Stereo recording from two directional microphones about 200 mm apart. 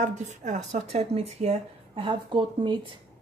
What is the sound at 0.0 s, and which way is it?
Speech, 35° right (ahead or behind).